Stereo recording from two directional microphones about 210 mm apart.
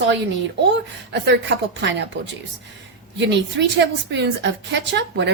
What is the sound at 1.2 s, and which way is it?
Speech, 60° right (ahead or behind).